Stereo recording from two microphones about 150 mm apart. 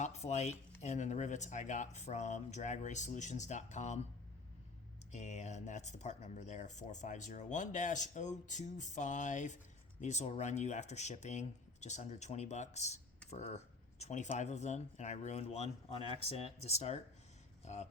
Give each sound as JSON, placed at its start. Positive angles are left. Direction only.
{"t": 0.0, "sound": "speech", "side_deg": 50}
{"t": 5.1, "sound": "speech", "side_deg": 50}